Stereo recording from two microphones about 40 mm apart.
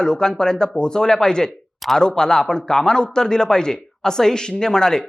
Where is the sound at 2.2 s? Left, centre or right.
Centre.